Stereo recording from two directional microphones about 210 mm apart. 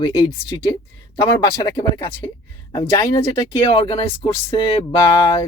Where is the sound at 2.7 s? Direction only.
15° left (ahead or behind).